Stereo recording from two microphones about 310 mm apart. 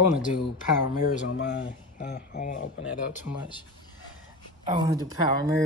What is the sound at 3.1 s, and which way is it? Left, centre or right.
Speech, centre.